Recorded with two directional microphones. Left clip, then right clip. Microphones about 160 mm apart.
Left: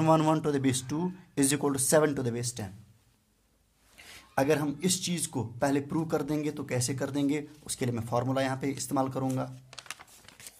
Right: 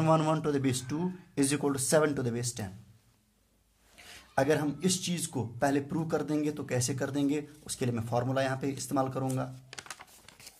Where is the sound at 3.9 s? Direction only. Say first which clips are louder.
Even; 20° left (ahead or behind).